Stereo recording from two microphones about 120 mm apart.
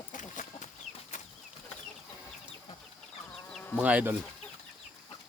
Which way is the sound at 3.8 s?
10° right (ahead or behind).